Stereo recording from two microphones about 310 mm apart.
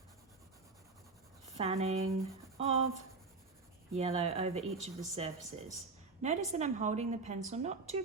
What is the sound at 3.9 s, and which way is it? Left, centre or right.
Speech, right.